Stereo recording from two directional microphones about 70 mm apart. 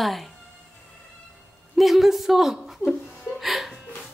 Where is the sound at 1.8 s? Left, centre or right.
Centre.